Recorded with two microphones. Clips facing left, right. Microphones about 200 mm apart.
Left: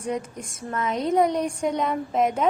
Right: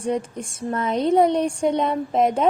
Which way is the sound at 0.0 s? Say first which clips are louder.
Right 4 dB; 30° right (ahead or behind).